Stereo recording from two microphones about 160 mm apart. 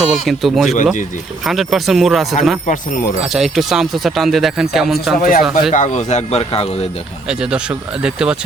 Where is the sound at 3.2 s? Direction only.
Centre (ahead or behind).